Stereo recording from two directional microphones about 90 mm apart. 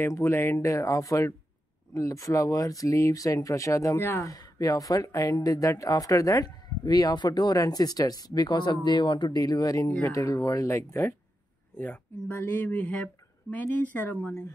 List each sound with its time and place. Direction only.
0.0 s speech: 30° left (ahead or behind); by 9.4 s 60° left (ahead or behind)
9.4 s speech: 40° left (ahead or behind); by 14.3 s 15° left (ahead or behind)